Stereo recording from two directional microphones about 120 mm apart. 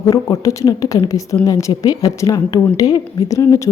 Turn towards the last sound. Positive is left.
turn(degrees=25)  # may be behind; listen again after turning